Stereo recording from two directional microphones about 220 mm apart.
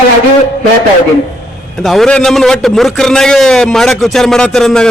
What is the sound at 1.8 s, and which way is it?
A man's voice, centre (ahead or behind).